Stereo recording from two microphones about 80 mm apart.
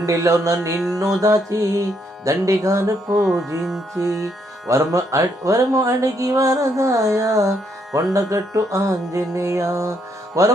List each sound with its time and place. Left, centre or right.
0.0 s music: right
3.2 s music: centre
4.7 s speech: right
10.4 s music: right